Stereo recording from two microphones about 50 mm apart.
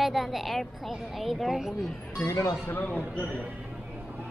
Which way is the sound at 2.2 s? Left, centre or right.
Left.